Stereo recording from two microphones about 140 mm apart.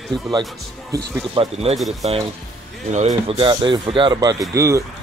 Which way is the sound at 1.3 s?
45° right (ahead or behind).